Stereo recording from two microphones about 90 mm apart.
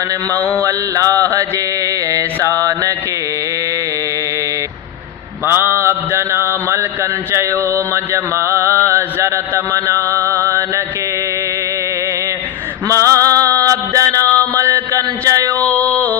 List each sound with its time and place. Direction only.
0.3 s mantra: 35° right (ahead or behind)
5.5 s mantra: 25° right (ahead or behind)
6.7 s a sound: 30° right (ahead or behind)
7.9 s mantra: 30° right (ahead or behind)
12.9 s a sound: 35° right (ahead or behind)
15.5 s mantra: 15° left (ahead or behind)